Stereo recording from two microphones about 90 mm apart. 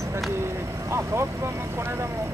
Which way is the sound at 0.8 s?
30° right (ahead or behind).